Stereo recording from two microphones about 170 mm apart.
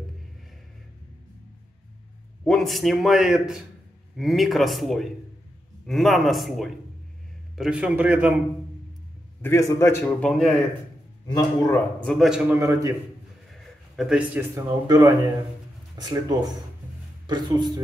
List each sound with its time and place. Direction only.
2.4 s a man's voice: centre (ahead or behind)
9.4 s a man's voice: 15° left (ahead or behind)
11.2 s a man's voice: 25° left (ahead or behind)
11.7 s a man's voice: 5° left (ahead or behind); by 12.9 s 15° right (ahead or behind)
13.5 s a sound: 5° right (ahead or behind)
14.5 s speech: 20° right (ahead or behind)